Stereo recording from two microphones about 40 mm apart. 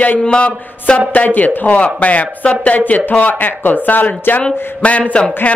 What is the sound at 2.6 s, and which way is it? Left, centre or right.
Speech, left.